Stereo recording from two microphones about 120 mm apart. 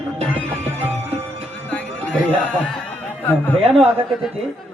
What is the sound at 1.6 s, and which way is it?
Music, 10° left (ahead or behind).